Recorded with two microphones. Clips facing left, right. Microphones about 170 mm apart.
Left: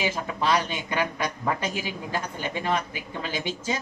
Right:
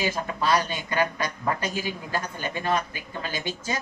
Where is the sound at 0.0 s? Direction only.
20° left (ahead or behind).